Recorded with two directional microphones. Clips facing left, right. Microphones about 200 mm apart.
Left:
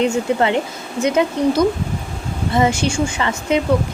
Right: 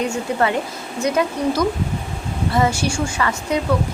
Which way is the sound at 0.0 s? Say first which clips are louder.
Left 3 dB; 25° left (ahead or behind).